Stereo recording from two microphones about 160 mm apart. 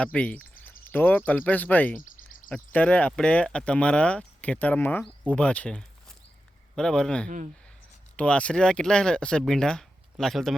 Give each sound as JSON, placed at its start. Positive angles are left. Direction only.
{"t": 0.0, "sound": "speech", "side_deg": 10}
{"t": 2.0, "sound": "a sound", "side_deg": 55}
{"t": 2.5, "sound": "speech", "side_deg": 10}
{"t": 7.3, "sound": "speech", "side_deg": -50}
{"t": 8.1, "sound": "speech", "side_deg": 5}